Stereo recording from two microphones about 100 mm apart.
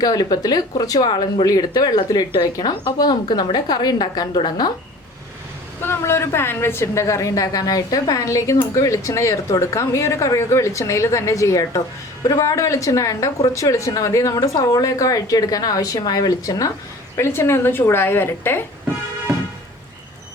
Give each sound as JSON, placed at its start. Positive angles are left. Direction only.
{"t": 0.0, "sound": "speech", "side_deg": 40}
{"t": 5.8, "sound": "speech", "side_deg": 25}
{"t": 17.2, "sound": "a woman's voice", "side_deg": 25}